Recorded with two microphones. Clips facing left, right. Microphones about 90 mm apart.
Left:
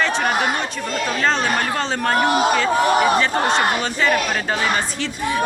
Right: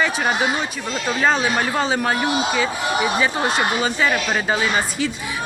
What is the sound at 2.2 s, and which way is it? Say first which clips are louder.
Speech: left 4 dB; 50° left (ahead or behind).